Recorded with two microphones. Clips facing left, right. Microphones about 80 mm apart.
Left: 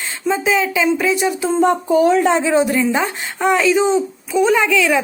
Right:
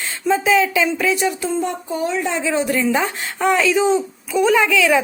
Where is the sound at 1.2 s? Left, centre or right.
Centre.